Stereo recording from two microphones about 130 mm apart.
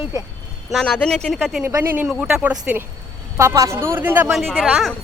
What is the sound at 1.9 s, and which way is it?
Speech, 10° right (ahead or behind).